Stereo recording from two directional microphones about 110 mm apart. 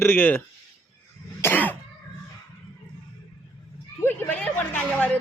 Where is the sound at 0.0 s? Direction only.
20° left (ahead or behind).